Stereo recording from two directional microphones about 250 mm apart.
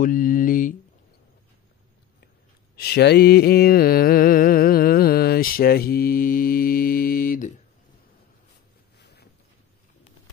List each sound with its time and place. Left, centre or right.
0.0 s mantra: left
2.7 s mantra: left
8.9 s a sound: left